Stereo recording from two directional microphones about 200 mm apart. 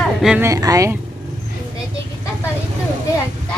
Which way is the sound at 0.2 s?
5° right (ahead or behind).